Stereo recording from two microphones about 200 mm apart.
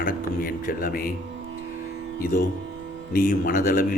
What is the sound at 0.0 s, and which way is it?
Music, 45° left (ahead or behind).